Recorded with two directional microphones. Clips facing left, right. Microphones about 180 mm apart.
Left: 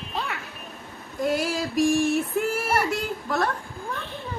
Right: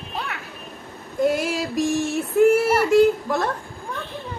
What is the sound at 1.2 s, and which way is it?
A man's voice, 25° right (ahead or behind).